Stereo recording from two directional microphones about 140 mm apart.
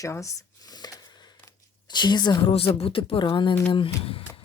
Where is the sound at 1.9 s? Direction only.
30° left (ahead or behind).